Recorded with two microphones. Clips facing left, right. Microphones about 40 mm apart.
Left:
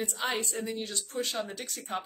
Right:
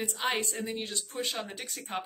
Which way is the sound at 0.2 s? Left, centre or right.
Right.